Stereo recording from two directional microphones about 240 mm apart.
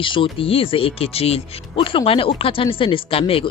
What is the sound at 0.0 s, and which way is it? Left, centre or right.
Speech, left.